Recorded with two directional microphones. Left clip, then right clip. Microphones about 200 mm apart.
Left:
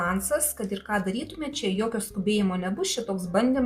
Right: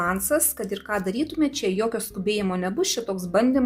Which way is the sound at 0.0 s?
40° right (ahead or behind).